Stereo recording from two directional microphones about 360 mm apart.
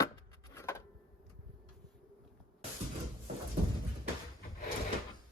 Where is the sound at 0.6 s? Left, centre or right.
Centre.